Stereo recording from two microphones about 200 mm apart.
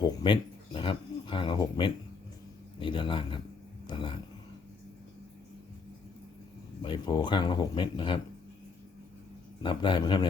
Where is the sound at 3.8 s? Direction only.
25° left (ahead or behind).